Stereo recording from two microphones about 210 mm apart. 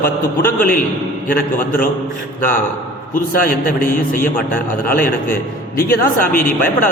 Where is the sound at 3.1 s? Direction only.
40° left (ahead or behind).